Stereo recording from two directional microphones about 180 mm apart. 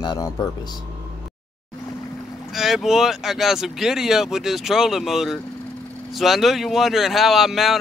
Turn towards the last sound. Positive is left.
turn(degrees=0)  # may be behind; listen again after turning